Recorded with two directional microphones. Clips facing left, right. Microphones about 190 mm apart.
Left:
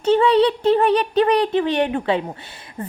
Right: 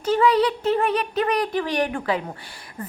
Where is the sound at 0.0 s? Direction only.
30° left (ahead or behind).